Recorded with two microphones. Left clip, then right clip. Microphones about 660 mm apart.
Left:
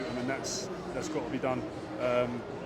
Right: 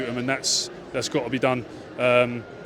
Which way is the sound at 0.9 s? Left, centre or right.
Right.